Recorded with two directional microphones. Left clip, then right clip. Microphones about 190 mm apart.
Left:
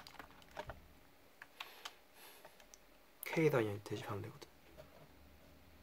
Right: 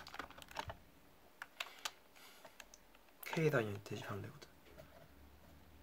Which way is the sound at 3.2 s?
50° left (ahead or behind).